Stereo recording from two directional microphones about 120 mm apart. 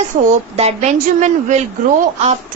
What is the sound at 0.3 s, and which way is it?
A woman's voice, 70° right (ahead or behind).